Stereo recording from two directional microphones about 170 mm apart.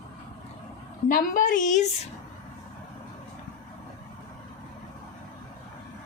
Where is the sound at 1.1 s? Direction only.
55° left (ahead or behind).